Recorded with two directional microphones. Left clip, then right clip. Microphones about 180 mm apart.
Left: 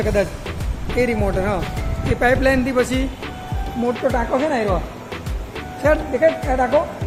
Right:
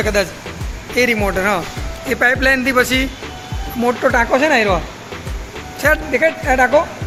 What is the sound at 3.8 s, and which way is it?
Speech, 15° right (ahead or behind).